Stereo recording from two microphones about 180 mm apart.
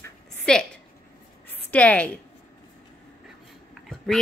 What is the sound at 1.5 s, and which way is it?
Speech, 10° left (ahead or behind).